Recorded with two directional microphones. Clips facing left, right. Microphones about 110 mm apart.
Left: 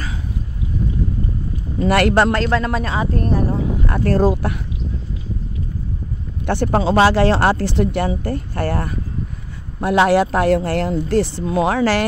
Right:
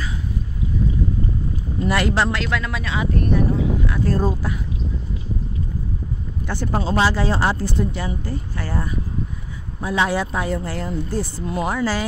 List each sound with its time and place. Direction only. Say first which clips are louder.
1.9 s speech: left 6 dB; 60° left (ahead or behind)
2.3 s speech: left 6 dB; 40° left (ahead or behind)
4.1 s speech: left 8 dB; 75° left (ahead or behind)
6.4 s speech: left 7 dB; 65° left (ahead or behind); by 12.1 s 80° left